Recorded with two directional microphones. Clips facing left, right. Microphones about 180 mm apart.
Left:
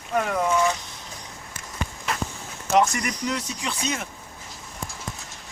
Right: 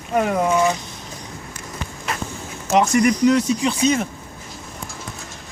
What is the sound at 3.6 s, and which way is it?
Speech, 30° right (ahead or behind).